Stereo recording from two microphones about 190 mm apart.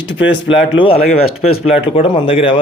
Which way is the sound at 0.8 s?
30° left (ahead or behind).